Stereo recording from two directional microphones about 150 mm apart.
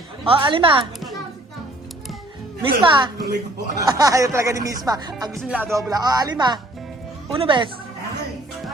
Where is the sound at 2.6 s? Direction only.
30° right (ahead or behind).